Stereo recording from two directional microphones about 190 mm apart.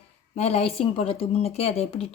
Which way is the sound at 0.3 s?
35° left (ahead or behind).